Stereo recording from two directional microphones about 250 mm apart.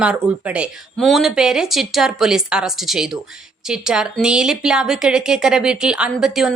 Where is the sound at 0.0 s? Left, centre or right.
Centre.